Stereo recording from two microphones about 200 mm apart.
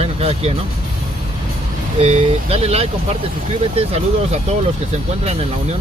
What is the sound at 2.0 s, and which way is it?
Speech, 30° right (ahead or behind).